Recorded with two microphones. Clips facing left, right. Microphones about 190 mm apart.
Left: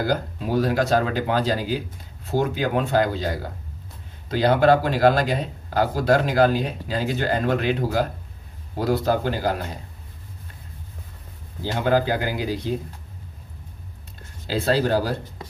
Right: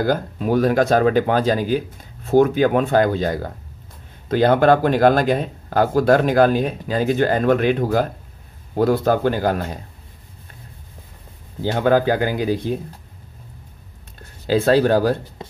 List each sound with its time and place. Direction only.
0.0 s speech: 55° right (ahead or behind)
11.6 s speech: 55° right (ahead or behind)
14.4 s speech: 55° right (ahead or behind)